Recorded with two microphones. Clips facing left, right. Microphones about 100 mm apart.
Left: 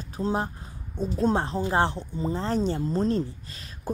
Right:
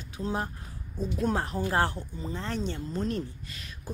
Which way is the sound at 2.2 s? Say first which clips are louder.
Left 7 dB; 35° left (ahead or behind).